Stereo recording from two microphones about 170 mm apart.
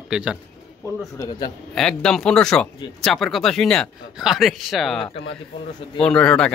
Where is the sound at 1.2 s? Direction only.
20° left (ahead or behind).